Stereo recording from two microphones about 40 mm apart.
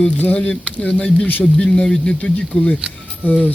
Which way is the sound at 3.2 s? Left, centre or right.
Left.